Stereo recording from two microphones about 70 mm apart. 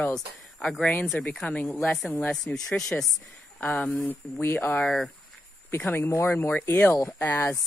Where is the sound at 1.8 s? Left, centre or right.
Centre.